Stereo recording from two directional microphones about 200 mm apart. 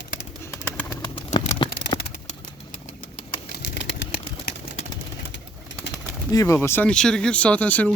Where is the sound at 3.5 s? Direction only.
60° left (ahead or behind).